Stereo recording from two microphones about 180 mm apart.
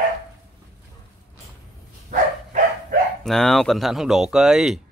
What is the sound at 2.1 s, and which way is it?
Dog, 40° right (ahead or behind).